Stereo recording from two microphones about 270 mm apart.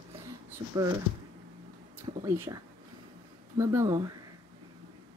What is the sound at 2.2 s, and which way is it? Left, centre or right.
Speech, centre.